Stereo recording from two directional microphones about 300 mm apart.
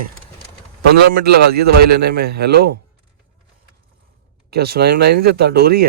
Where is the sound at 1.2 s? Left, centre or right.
Right.